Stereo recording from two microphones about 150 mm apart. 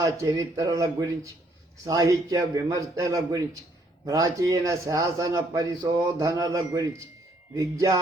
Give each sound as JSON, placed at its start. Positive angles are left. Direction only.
{"t": 0.0, "sound": "a man's voice", "side_deg": -20}